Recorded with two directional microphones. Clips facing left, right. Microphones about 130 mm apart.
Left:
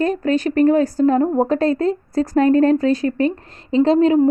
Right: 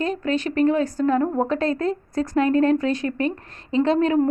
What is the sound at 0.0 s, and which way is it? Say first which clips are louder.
A woman's voice: left 5 dB; 40° left (ahead or behind).